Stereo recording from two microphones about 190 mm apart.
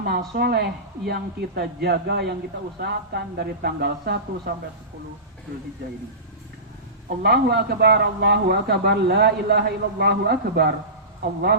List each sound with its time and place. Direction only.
0.3 s a man's voice: 55° right (ahead or behind)
7.2 s a man's voice: 55° right (ahead or behind)